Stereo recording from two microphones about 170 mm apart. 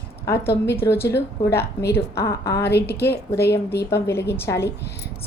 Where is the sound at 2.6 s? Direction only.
75° left (ahead or behind).